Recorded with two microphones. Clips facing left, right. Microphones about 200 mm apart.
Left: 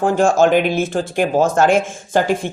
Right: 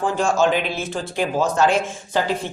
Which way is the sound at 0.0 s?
50° left (ahead or behind).